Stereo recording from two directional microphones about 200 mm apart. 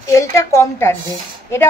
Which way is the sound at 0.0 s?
15° left (ahead or behind).